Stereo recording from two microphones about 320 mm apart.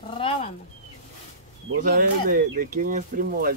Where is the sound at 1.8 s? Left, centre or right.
Right.